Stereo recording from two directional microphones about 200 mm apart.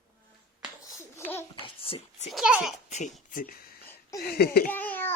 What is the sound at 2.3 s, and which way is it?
Speech, centre (ahead or behind).